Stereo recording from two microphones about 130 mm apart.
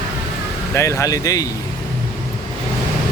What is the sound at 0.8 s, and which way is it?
Speech, 25° left (ahead or behind).